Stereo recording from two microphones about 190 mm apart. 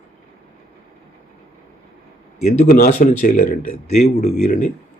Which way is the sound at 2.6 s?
40° left (ahead or behind).